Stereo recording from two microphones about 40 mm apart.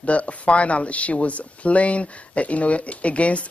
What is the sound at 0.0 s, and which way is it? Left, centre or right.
Speech, left.